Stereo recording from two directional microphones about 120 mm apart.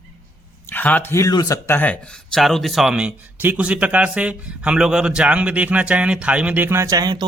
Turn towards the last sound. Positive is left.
turn(degrees=-35)  # may be behind; listen again after turning